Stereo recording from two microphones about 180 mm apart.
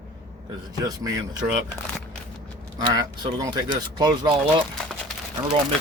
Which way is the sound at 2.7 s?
25° right (ahead or behind).